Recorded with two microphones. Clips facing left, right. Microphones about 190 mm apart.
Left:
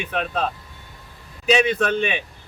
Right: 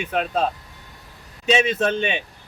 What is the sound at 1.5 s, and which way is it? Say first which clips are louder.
Speech: left 1 dB; 25° right (ahead or behind).